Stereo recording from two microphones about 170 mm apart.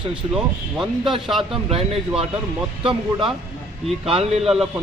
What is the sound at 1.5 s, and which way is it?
Speech, 35° right (ahead or behind).